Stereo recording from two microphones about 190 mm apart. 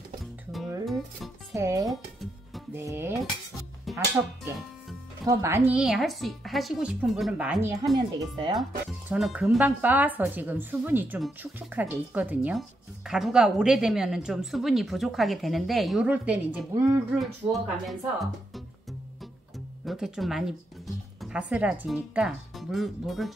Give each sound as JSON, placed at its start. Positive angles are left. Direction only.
{"t": 1.5, "sound": "music", "side_deg": -15}
{"t": 2.7, "sound": "dishes", "side_deg": -15}
{"t": 5.2, "sound": "speech", "side_deg": -15}
{"t": 7.9, "sound": "speech", "side_deg": -20}
{"t": 9.1, "sound": "speech", "side_deg": -5}
{"t": 19.8, "sound": "speech", "side_deg": 0}